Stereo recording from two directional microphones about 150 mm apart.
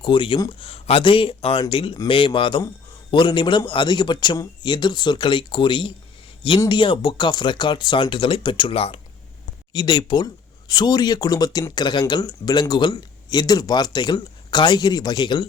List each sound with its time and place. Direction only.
0.0 s speech: 35° left (ahead or behind)